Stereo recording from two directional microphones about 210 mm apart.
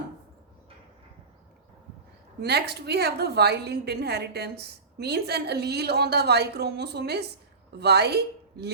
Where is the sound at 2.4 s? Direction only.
50° right (ahead or behind).